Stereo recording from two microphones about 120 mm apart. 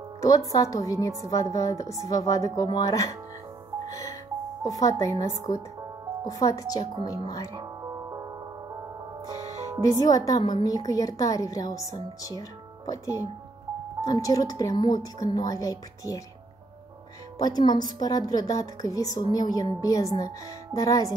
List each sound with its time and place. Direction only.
0.2 s a woman's voice: 30° left (ahead or behind)
3.8 s music: 30° left (ahead or behind)
4.6 s a woman's voice: 30° left (ahead or behind)
7.8 s music: 25° right (ahead or behind)
10.0 s speech: 30° left (ahead or behind)
17.4 s a woman's voice: 35° left (ahead or behind)